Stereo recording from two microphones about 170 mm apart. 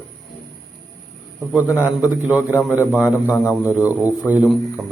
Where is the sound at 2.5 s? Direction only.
15° left (ahead or behind).